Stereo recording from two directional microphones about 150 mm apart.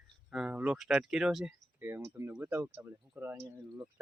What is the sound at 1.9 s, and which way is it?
Speech, 15° right (ahead or behind).